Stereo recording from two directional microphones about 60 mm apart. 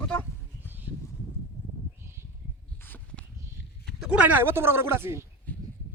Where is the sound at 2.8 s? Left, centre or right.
Left.